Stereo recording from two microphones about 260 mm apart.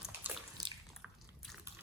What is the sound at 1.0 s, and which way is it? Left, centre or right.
Biting, centre.